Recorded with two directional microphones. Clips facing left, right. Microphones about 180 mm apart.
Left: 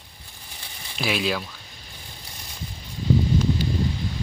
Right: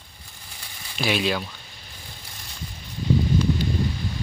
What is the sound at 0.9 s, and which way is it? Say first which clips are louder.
Speech: right 1 dB; centre (ahead or behind).